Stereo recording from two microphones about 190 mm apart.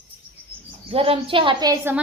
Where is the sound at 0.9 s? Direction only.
30° right (ahead or behind).